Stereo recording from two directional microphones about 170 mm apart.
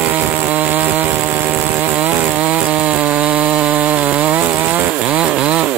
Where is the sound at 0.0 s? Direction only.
10° right (ahead or behind).